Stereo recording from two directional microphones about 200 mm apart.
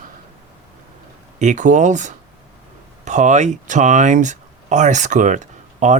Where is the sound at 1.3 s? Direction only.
40° right (ahead or behind).